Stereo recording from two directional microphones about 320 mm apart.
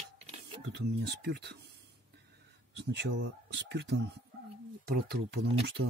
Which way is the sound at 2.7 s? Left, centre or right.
Right.